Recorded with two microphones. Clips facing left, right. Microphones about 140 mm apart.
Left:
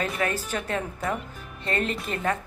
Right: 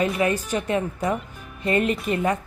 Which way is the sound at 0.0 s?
5° right (ahead or behind).